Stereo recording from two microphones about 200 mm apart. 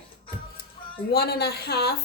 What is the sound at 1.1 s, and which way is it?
Speech, 55° left (ahead or behind).